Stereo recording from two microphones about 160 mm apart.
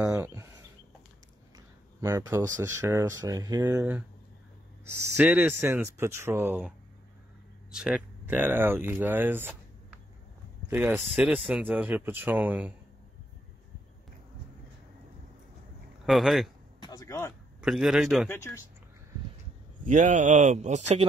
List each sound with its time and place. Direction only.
0.0 s a sound: 20° right (ahead or behind)
2.0 s speech: 15° right (ahead or behind)
7.7 s speech: 5° right (ahead or behind)
10.7 s speech: 10° right (ahead or behind)
16.1 s a man's voice: centre (ahead or behind)
16.8 s a sound: 20° left (ahead or behind)
17.6 s a man's voice: 5° right (ahead or behind)
18.3 s speech: 15° left (ahead or behind)
19.8 s speech: 50° right (ahead or behind)